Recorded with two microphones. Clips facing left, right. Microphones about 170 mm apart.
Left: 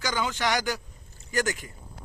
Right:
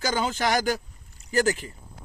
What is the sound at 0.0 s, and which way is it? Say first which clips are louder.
Speech: right 3 dB; 45° right (ahead or behind).